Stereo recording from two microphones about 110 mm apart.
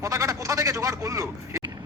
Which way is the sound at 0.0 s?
30° right (ahead or behind).